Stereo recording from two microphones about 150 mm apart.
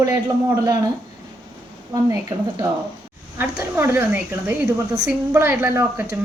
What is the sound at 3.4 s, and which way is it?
A woman's voice, 15° right (ahead or behind).